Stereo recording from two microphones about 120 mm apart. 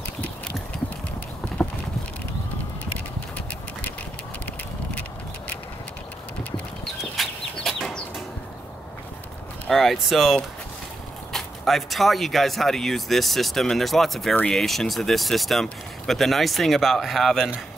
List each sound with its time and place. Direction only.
6.5 s chicken: 5° left (ahead or behind)
9.7 s speech: centre (ahead or behind)